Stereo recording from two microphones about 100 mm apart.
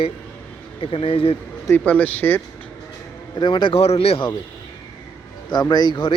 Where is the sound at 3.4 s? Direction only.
50° left (ahead or behind); by 4.2 s 80° left.